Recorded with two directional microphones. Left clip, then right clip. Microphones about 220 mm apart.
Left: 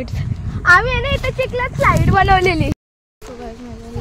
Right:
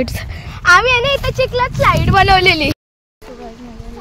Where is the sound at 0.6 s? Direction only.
40° right (ahead or behind).